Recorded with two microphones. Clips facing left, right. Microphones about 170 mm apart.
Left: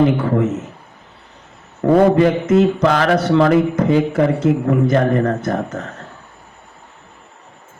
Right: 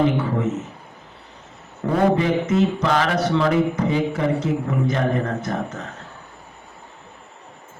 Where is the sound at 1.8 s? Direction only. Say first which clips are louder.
Left 7 dB; 55° left (ahead or behind).